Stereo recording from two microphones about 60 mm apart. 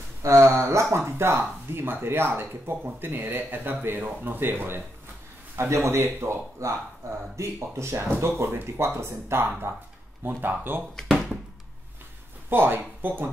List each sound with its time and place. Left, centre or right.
0.2 s speech: right
5.7 s speech: right
10.4 s speech: right
12.4 s speech: right